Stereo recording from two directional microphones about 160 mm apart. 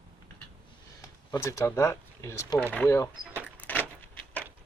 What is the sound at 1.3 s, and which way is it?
Speech, 20° left (ahead or behind).